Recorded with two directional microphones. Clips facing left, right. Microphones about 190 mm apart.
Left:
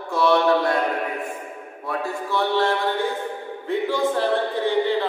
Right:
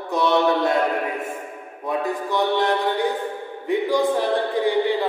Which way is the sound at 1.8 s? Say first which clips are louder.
Right 3 dB; 20° right (ahead or behind).